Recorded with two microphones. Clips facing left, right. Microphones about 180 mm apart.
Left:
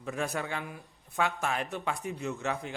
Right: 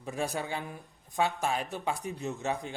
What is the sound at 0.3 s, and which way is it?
Speech, 20° right (ahead or behind).